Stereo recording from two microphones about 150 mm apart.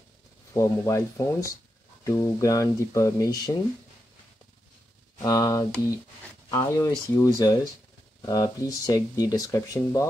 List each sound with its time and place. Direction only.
0.5 s speech: 20° left (ahead or behind)
5.2 s speech: 25° left (ahead or behind)